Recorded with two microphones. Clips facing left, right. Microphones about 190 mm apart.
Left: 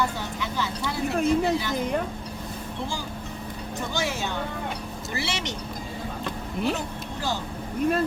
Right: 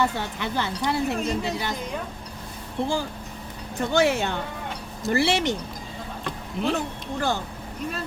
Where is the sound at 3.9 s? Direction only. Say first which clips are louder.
Right 8 dB; 60° right (ahead or behind).